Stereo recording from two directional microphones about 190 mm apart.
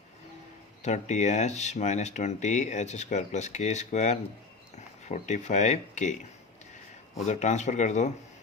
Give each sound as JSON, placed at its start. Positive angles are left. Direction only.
{"t": 0.8, "sound": "speech", "side_deg": 40}
{"t": 7.2, "sound": "speech", "side_deg": 40}